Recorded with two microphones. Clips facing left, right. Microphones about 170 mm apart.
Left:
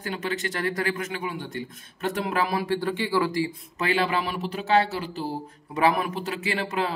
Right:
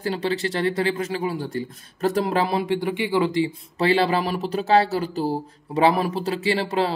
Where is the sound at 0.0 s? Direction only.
30° right (ahead or behind).